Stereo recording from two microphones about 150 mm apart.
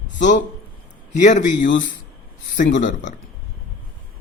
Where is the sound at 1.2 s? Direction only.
55° left (ahead or behind).